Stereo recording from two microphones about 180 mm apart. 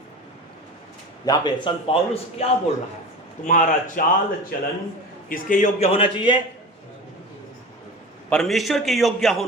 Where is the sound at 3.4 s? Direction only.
45° left (ahead or behind); by 6.4 s 25° left (ahead or behind).